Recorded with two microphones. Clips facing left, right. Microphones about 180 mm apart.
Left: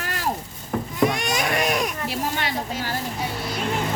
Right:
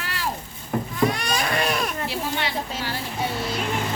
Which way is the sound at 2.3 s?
45° left (ahead or behind).